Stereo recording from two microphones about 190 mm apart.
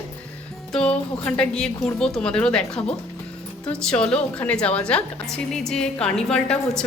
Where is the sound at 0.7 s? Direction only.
5° left (ahead or behind).